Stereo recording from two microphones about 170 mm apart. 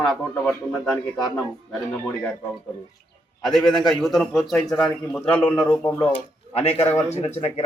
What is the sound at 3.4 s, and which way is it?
A man's voice, centre (ahead or behind).